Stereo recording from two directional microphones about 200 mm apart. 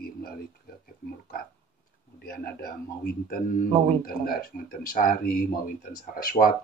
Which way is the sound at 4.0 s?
50° left (ahead or behind).